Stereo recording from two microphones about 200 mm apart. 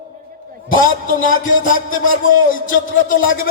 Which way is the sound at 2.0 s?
80° left.